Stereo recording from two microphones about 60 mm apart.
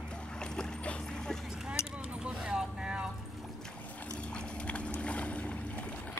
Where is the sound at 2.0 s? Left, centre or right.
Right.